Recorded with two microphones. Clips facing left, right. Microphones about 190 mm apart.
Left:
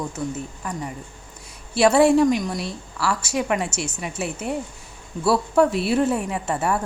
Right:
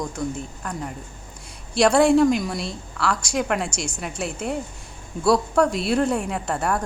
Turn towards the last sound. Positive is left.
turn(degrees=5)  # may be behind; listen again after turning